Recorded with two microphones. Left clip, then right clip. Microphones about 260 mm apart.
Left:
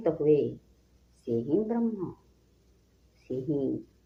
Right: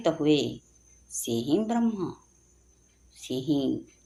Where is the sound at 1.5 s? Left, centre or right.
Right.